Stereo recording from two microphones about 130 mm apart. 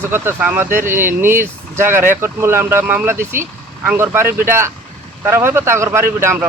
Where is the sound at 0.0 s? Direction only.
15° right (ahead or behind).